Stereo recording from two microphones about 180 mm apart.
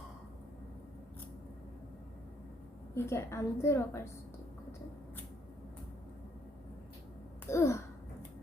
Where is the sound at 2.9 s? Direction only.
15° left (ahead or behind).